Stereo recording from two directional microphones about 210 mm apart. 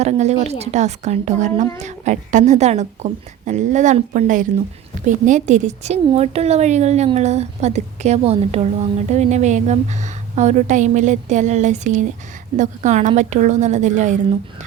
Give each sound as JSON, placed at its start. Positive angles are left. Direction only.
{"t": 0.0, "sound": "a woman's voice", "side_deg": -30}